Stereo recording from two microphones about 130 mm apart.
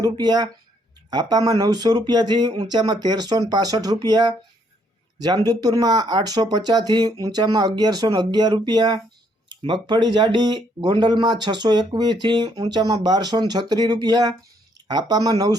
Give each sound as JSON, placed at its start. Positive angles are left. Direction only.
{"t": 0.0, "sound": "speech", "side_deg": -35}